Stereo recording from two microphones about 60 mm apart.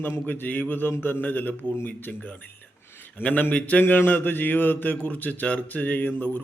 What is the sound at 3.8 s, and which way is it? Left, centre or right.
A man's voice, left.